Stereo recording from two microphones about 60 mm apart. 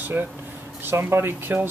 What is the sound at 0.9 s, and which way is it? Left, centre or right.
Speech, right.